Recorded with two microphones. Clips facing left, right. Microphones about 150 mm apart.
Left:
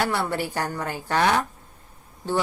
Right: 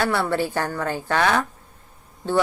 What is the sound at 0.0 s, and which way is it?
A woman's voice, 15° left (ahead or behind).